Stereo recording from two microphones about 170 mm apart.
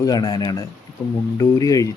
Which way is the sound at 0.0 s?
25° left (ahead or behind).